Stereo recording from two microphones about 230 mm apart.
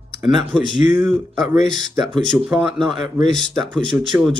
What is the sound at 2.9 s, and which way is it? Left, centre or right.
Speech, centre.